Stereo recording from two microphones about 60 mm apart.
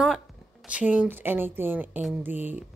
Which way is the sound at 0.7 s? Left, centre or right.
Right.